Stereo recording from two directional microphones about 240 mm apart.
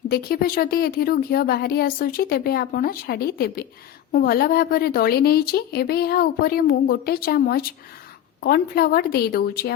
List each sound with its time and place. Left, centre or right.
0.1 s speech: left